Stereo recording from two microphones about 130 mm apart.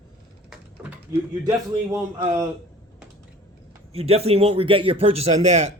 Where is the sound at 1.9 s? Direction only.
20° right (ahead or behind).